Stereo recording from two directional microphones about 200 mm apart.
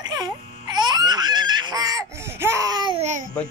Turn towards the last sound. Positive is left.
turn(degrees=-35)  # may be behind; listen again after turning